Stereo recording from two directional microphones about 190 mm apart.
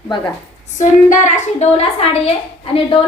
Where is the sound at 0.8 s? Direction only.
40° left (ahead or behind).